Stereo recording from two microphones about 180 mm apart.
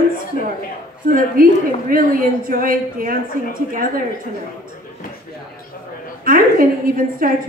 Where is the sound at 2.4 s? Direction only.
50° right (ahead or behind).